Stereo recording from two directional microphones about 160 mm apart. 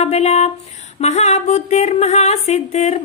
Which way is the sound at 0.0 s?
45° left (ahead or behind).